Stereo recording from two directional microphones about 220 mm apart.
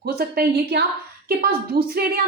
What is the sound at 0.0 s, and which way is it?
Speech, 45° right (ahead or behind).